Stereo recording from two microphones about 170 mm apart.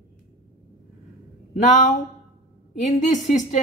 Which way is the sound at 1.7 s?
45° left (ahead or behind).